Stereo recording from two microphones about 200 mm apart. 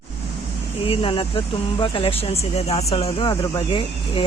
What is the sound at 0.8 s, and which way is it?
Speech, 25° left (ahead or behind).